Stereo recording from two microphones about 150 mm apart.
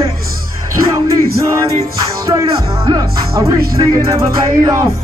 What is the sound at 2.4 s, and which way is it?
Music, 25° right (ahead or behind).